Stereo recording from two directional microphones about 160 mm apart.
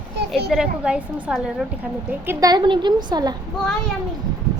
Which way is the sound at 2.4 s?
30° right (ahead or behind).